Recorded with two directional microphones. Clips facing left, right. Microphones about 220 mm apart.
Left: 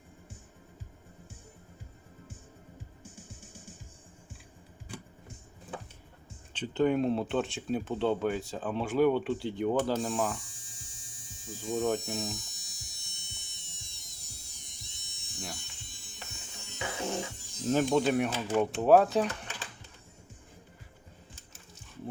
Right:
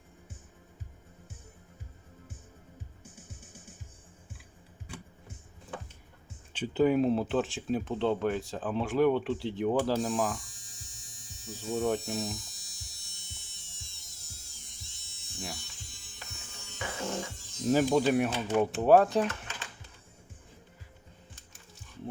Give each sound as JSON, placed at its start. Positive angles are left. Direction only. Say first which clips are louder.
{"t": 6.5, "sound": "speech", "louder": "right 2 dB", "side_deg": -10}
{"t": 11.7, "sound": "speech", "louder": "even", "side_deg": -5}
{"t": 12.4, "sound": "music", "louder": "even", "side_deg": 20}
{"t": 16.7, "sound": "music", "louder": "left 1 dB", "side_deg": 15}
{"t": 17.7, "sound": "speech", "louder": "right 1 dB", "side_deg": -5}